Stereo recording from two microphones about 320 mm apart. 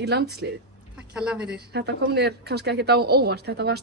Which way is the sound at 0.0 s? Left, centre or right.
Right.